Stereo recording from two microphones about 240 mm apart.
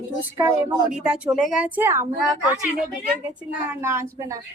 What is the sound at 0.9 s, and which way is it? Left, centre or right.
A woman's voice, centre.